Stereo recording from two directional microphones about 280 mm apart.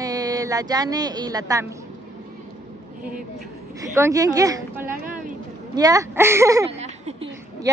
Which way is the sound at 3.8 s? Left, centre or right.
Centre.